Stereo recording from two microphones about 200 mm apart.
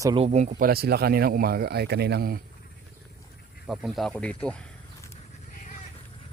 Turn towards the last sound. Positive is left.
turn(degrees=5)  # may be behind; listen again after turning